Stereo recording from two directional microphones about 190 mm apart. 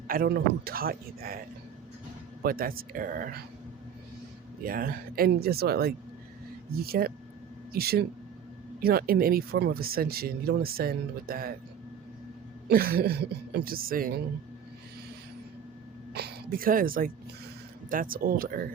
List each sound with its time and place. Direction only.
0.1 s speech: 55° right (ahead or behind)
2.4 s speech: 50° right (ahead or behind)
4.6 s speech: 50° right (ahead or behind)
12.6 s speech: 55° right (ahead or behind)
16.1 s a woman's voice: 55° right (ahead or behind)